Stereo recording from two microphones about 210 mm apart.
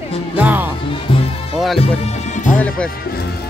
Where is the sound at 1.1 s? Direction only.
25° left (ahead or behind).